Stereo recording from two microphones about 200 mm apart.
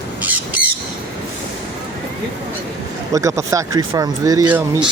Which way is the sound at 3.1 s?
15° right (ahead or behind).